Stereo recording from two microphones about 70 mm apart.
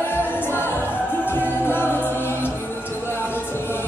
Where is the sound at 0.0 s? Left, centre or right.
Left.